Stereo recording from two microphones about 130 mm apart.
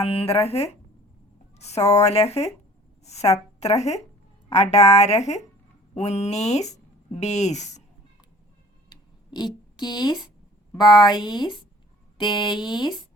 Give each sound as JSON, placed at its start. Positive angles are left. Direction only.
{"t": 0.0, "sound": "a woman's voice", "side_deg": 50}
{"t": 8.9, "sound": "a sound", "side_deg": 35}
{"t": 10.8, "sound": "speech", "side_deg": 35}